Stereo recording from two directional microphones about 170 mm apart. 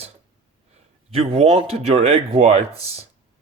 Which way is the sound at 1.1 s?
35° right (ahead or behind).